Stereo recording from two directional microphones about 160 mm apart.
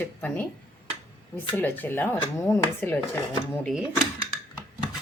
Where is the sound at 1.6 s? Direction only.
10° left (ahead or behind).